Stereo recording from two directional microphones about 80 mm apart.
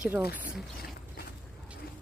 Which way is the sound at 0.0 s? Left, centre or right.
Right.